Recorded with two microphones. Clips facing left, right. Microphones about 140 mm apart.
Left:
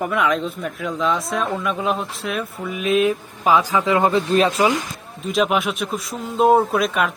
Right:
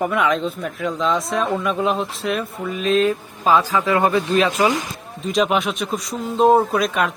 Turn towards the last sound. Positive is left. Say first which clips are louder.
# even
turn(degrees=0)  # may be behind; listen again after turning